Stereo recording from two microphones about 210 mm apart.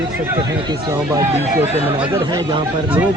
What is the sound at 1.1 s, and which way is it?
Speech, 15° right (ahead or behind).